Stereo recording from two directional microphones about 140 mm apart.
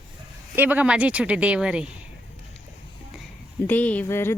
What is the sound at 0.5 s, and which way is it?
Speech, 10° right (ahead or behind).